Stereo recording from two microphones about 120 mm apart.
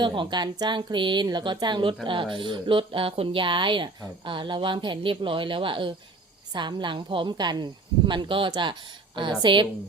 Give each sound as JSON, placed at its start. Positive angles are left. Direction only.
{"t": 0.0, "sound": "a woman's voice", "side_deg": -40}